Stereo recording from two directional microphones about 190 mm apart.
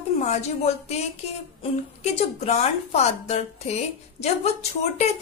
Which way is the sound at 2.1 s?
35° left (ahead or behind).